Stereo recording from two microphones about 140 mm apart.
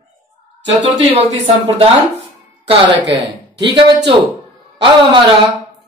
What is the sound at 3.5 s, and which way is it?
A woman's voice, 35° right (ahead or behind).